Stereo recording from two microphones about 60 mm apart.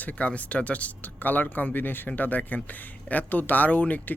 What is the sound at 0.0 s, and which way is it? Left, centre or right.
Speech, left.